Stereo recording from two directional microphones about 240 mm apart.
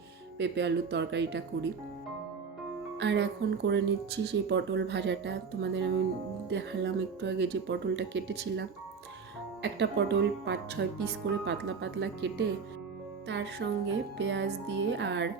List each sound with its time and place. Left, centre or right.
0.3 s speech: right
3.0 s speech: right